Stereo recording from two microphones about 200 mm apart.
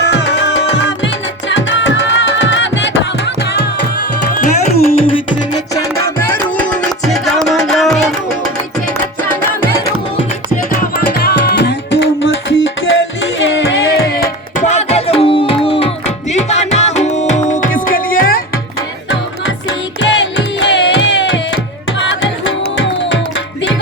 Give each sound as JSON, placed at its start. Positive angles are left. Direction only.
{"t": 0.0, "sound": "music", "side_deg": 60}
{"t": 4.9, "sound": "music", "side_deg": 25}
{"t": 5.7, "sound": "music", "side_deg": 15}
{"t": 10.7, "sound": "music", "side_deg": 50}
{"t": 14.6, "sound": "music", "side_deg": 35}
{"t": 19.6, "sound": "music", "side_deg": 60}